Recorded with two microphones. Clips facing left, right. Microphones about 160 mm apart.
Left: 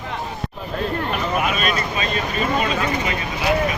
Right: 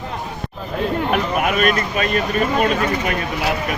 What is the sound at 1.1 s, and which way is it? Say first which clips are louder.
Vehicle: right 3 dB; 55° right (ahead or behind).